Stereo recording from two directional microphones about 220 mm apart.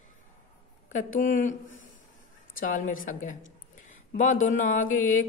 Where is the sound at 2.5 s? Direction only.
35° left (ahead or behind).